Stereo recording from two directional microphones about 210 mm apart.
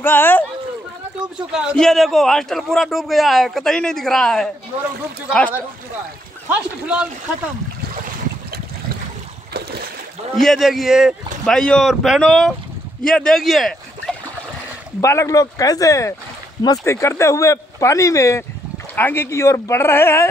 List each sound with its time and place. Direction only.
0.0 s speech: 10° left (ahead or behind)
1.5 s a man's voice: 5° right (ahead or behind)
6.5 s a man's voice: 5° right (ahead or behind)
9.5 s boat: 50° right (ahead or behind)
10.3 s a man's voice: centre (ahead or behind)
15.0 s speech: 15° left (ahead or behind)